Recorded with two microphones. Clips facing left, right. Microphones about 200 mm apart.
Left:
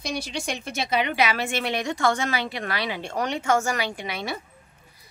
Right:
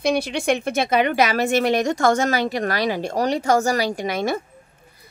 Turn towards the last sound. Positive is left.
turn(degrees=-45)  # may be behind; listen again after turning